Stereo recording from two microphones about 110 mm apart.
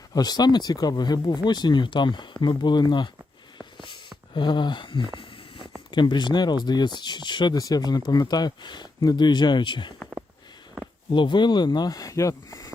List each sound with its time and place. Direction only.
0.1 s speech: 40° left (ahead or behind)
4.4 s speech: 45° left (ahead or behind)
11.1 s speech: 45° left (ahead or behind)